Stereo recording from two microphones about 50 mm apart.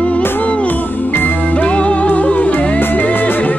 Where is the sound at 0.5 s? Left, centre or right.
Left.